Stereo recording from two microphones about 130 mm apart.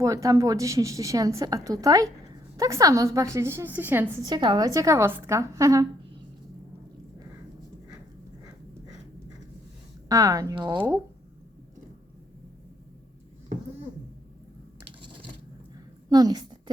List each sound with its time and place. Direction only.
0.0 s a woman's voice: 25° right (ahead or behind)
4.3 s a woman's voice: 35° right (ahead or behind)
10.1 s a woman's voice: 25° right (ahead or behind)
16.0 s a sound: 30° right (ahead or behind)